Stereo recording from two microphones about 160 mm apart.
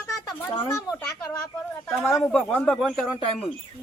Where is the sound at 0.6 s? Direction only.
15° left (ahead or behind).